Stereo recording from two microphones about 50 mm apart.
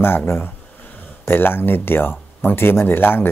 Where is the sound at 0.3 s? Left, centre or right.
Left.